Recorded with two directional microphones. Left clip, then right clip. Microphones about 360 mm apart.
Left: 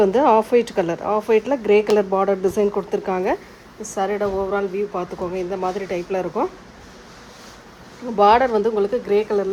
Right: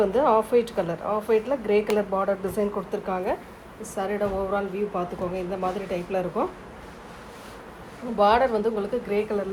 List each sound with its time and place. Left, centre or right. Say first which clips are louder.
0.0 s speech: left 5 dB; left
8.2 s speech: left 5 dB; left